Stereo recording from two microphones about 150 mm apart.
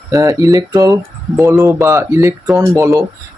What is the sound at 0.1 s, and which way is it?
Speech, 20° right (ahead or behind).